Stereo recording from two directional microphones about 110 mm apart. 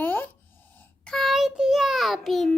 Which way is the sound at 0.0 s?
15° left (ahead or behind).